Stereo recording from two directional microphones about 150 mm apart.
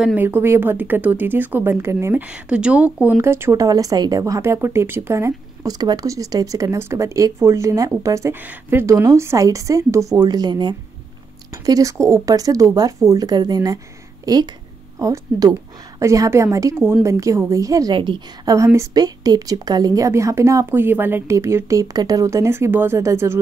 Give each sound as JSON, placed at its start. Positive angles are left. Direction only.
{"t": 0.0, "sound": "speech", "side_deg": -10}